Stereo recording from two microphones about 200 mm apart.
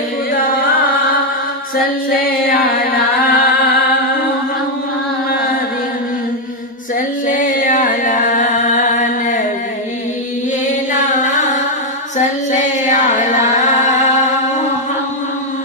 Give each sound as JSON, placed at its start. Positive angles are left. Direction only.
{"t": 0.3, "sound": "carnatic music", "side_deg": 45}
{"t": 2.0, "sound": "music", "side_deg": 45}
{"t": 7.2, "sound": "music", "side_deg": 40}
{"t": 10.9, "sound": "music", "side_deg": 40}
{"t": 12.5, "sound": "music", "side_deg": 35}